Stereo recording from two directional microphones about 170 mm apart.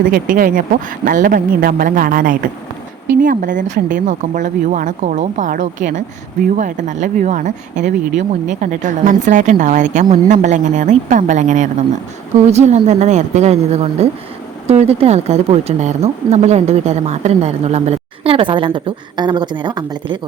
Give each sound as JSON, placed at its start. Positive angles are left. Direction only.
{"t": 0.0, "sound": "speech", "side_deg": -55}